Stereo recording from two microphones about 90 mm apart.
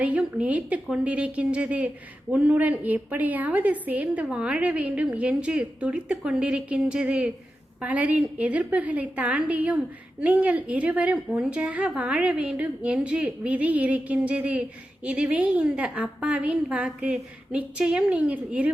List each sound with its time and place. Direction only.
0.0 s a woman's voice: 15° right (ahead or behind)